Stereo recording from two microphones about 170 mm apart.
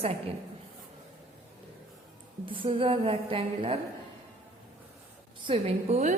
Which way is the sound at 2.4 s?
30° right (ahead or behind).